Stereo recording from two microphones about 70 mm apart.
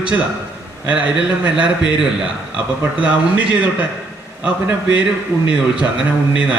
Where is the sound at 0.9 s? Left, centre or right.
Centre.